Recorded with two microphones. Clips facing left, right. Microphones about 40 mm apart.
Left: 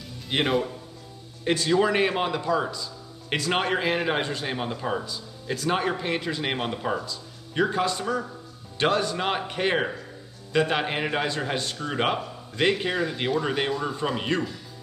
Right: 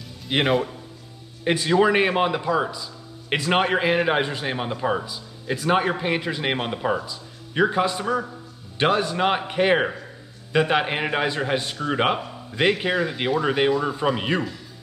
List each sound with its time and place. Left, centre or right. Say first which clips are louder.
0.3 s a man's voice: right 3 dB; centre